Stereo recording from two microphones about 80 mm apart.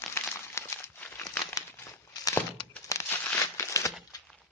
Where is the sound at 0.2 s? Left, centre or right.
Left.